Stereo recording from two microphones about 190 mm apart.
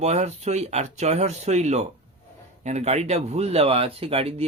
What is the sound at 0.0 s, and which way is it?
Speech, 35° right (ahead or behind).